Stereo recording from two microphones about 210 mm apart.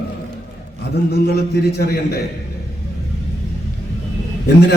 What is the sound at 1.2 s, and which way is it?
Speech, 50° left (ahead or behind).